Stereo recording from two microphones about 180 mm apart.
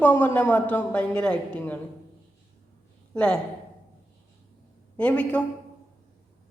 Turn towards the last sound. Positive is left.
turn(degrees=5)  # may be behind; listen again after turning